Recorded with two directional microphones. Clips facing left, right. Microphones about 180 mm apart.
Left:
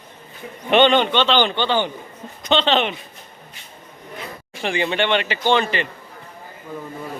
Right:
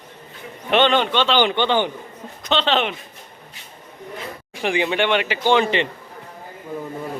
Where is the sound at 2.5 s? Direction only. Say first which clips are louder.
Left 2 dB; 5° right (ahead or behind).